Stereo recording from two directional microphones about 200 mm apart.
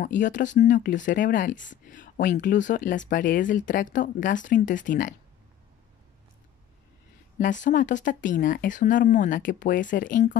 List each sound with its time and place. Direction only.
0.0 s speech: 40° left (ahead or behind)
7.3 s speech: 40° left (ahead or behind)